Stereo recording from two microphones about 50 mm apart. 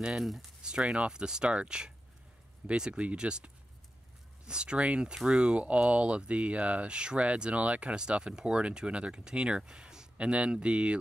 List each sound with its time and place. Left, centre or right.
0.2 s speech: centre
0.6 s speech: centre
5.1 s speech: centre